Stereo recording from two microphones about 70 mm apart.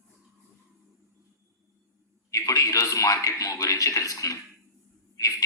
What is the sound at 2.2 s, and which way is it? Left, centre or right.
Speech, left.